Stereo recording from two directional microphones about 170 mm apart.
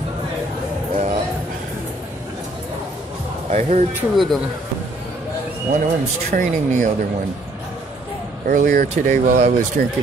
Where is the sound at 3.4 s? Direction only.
45° right (ahead or behind).